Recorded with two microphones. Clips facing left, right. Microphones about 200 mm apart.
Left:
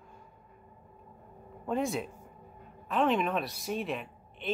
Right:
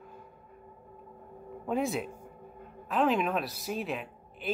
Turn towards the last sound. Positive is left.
turn(degrees=0)  # may be behind; listen again after turning